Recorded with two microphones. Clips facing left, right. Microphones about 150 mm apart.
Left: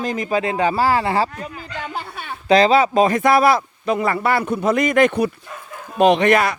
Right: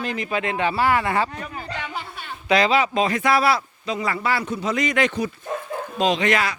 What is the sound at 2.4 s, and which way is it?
A man's voice, 35° left (ahead or behind).